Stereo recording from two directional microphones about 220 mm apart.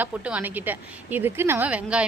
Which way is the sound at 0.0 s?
5° right (ahead or behind).